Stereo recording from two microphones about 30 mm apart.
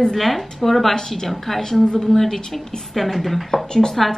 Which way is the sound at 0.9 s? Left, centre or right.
Centre.